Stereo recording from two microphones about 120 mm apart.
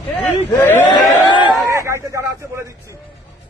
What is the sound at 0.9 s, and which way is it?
Speech, 40° left (ahead or behind).